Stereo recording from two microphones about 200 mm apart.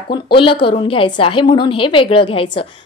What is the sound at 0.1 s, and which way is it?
A woman's voice, 25° left (ahead or behind).